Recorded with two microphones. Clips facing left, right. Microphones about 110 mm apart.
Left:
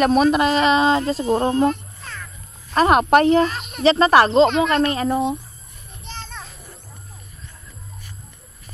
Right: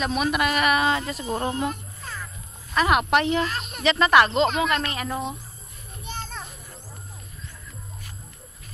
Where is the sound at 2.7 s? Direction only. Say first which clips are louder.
Left 6 dB; 40° left (ahead or behind).